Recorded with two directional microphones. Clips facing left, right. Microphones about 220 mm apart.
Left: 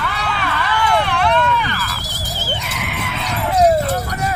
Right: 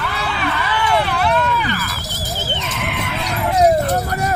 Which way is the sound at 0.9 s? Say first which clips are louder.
Even; 5° right (ahead or behind).